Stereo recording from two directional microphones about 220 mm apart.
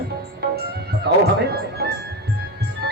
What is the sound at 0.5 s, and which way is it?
Music, 45° right (ahead or behind).